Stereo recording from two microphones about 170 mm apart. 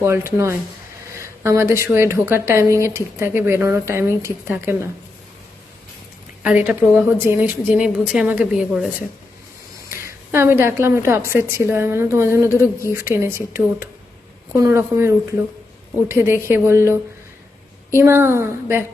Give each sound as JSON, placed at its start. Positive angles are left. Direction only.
{"t": 0.0, "sound": "speech", "side_deg": -15}
{"t": 6.4, "sound": "a woman's voice", "side_deg": -10}